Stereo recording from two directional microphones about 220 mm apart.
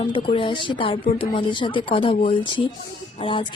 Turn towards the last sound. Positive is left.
turn(degrees=25)  # may be behind; listen again after turning